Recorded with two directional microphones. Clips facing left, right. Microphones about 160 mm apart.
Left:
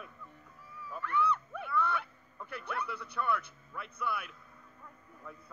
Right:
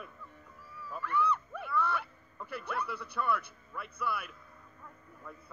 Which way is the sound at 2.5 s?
5° right (ahead or behind).